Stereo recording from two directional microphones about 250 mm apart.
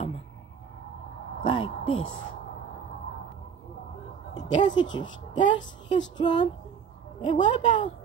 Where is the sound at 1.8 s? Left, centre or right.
Left.